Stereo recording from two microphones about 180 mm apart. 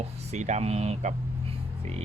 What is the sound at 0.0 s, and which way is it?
Speech, 40° right (ahead or behind).